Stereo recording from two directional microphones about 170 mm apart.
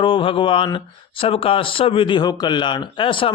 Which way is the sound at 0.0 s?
30° left (ahead or behind).